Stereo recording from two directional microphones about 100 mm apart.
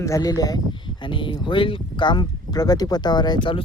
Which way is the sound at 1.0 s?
55° left (ahead or behind).